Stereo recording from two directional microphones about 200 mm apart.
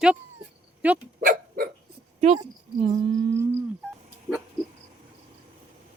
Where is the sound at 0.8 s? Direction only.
5° right (ahead or behind).